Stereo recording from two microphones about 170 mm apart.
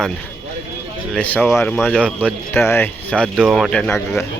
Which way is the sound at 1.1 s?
5° left (ahead or behind).